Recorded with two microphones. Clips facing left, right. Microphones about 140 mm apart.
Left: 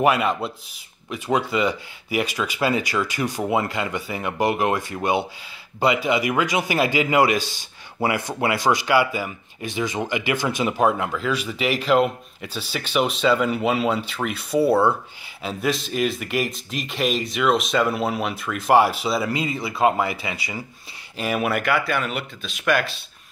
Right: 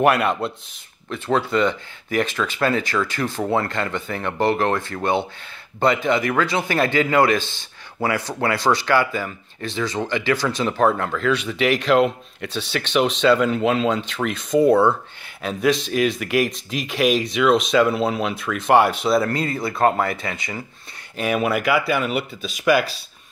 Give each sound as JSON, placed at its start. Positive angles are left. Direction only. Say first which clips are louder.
{"t": 0.0, "sound": "speech", "louder": "right 2 dB", "side_deg": 0}